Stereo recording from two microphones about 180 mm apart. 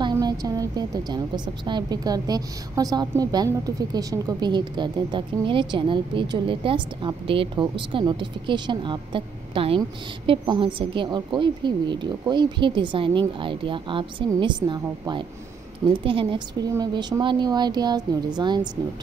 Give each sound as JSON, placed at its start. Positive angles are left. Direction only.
{"t": 0.0, "sound": "a woman's voice", "side_deg": -20}